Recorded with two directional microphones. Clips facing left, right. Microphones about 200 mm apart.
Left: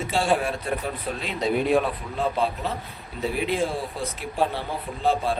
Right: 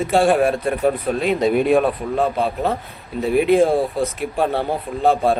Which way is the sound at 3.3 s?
55° right (ahead or behind).